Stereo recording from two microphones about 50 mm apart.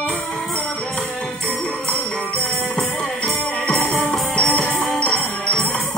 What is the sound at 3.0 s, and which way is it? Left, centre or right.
Music, centre.